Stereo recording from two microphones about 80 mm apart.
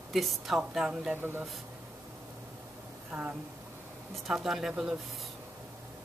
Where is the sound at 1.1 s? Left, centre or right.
Right.